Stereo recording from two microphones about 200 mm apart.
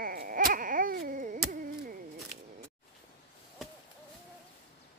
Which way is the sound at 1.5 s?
45° right (ahead or behind).